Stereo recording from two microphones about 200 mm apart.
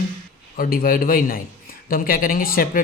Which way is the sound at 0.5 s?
45° left (ahead or behind).